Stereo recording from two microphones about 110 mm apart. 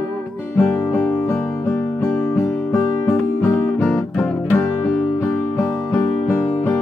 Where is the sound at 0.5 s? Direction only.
15° left (ahead or behind).